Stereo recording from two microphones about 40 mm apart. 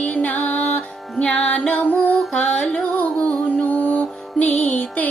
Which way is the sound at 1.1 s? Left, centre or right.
Left.